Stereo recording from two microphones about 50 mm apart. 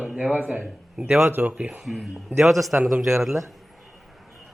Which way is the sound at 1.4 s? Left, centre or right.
Right.